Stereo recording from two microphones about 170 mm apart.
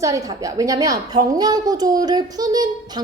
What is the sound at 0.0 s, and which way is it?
A woman's voice, 20° right (ahead or behind).